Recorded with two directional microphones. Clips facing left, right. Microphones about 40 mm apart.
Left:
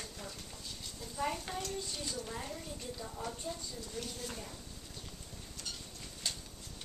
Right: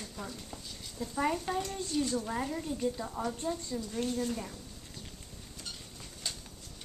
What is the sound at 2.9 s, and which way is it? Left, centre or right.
Speech, right.